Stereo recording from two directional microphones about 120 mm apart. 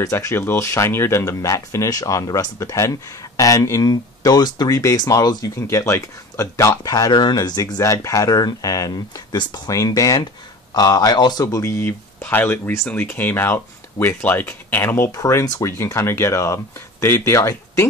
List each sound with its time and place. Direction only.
0.0 s speech: 25° left (ahead or behind)
11.4 s speech: 25° left (ahead or behind)